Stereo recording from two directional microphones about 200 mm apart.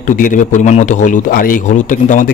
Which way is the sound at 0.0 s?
40° left (ahead or behind).